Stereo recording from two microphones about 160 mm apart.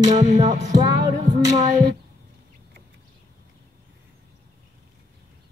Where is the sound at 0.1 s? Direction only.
50° right (ahead or behind).